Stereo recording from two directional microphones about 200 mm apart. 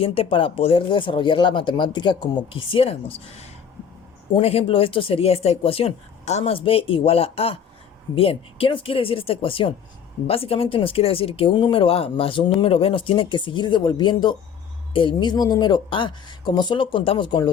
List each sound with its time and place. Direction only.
0.0 s speech: 30° left (ahead or behind)
4.4 s speech: 30° left (ahead or behind)